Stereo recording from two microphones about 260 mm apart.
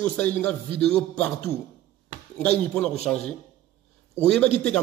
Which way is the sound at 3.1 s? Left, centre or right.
Centre.